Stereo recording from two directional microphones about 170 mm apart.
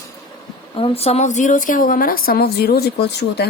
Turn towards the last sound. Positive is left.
turn(degrees=70)  # may be behind; listen again after turning